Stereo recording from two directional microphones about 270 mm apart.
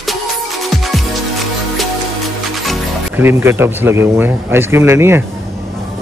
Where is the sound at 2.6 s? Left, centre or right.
Centre.